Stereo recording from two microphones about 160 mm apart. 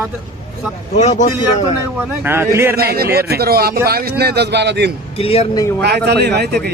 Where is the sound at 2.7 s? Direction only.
75° right (ahead or behind).